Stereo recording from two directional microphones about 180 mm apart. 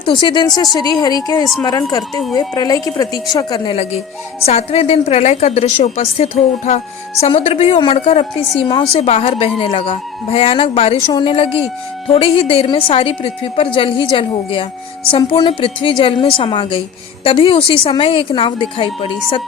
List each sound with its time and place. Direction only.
0.0 s a woman's voice: 25° left (ahead or behind)